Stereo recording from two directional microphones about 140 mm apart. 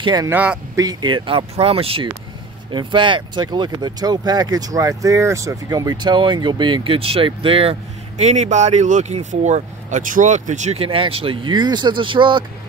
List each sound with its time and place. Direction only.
0.0 s speech: 30° right (ahead or behind)
0.3 s speech: 10° right (ahead or behind)
0.7 s speech: 30° right (ahead or behind)
8.2 s speech: 55° right (ahead or behind); by 12.4 s 35° right (ahead or behind)